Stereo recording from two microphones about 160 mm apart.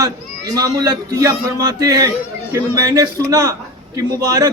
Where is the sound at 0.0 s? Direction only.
20° right (ahead or behind).